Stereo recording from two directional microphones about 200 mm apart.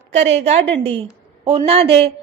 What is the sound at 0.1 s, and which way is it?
A woman's voice, 35° right (ahead or behind).